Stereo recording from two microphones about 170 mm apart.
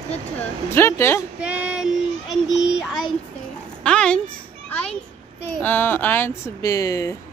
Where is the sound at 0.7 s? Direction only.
15° left (ahead or behind).